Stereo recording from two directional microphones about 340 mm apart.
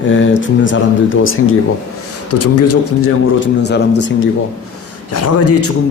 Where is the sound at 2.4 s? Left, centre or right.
Left.